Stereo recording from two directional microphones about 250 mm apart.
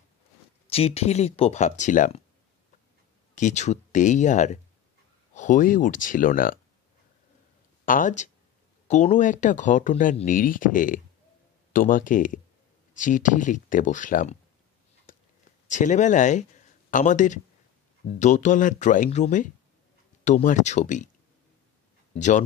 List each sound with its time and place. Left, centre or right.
0.7 s speech: left
3.3 s speech: left
7.8 s speech: left
15.1 s a sound: left
15.7 s speech: left
22.1 s speech: left